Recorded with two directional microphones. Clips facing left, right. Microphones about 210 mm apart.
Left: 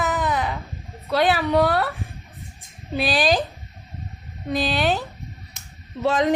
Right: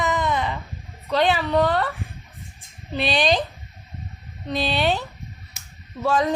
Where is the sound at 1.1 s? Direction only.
5° left (ahead or behind).